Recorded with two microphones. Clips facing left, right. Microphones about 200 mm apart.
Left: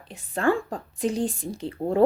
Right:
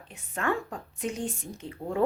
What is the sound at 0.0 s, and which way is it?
A woman's voice, 35° left (ahead or behind).